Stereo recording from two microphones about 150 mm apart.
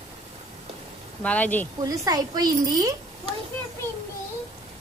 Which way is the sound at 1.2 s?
10° left (ahead or behind).